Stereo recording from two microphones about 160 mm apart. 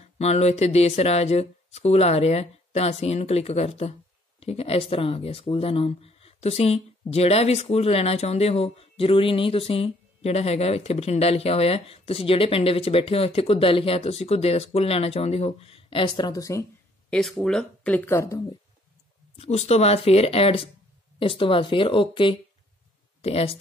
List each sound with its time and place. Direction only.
0.0 s speech: 40° left (ahead or behind); by 16.6 s 20° left (ahead or behind)
17.1 s speech: centre (ahead or behind); by 18.4 s 15° left (ahead or behind)
19.3 s speech: 45° left (ahead or behind)